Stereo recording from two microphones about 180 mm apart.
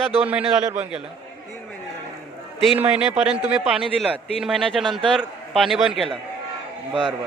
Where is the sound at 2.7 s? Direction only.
5° right (ahead or behind).